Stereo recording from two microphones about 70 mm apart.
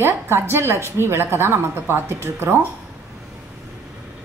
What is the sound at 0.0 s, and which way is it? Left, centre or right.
A woman's voice, right.